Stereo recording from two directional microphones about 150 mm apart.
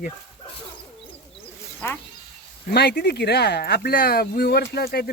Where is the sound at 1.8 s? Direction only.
15° left (ahead or behind).